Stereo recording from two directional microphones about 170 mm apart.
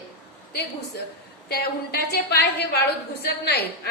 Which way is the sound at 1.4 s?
70° left (ahead or behind).